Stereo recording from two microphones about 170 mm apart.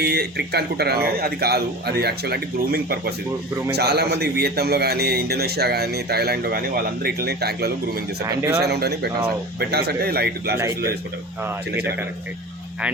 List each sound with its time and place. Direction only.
0.0 s a man's voice: 70° right (ahead or behind)
8.4 s speech: 15° right (ahead or behind)
8.6 s a man's voice: 70° right (ahead or behind)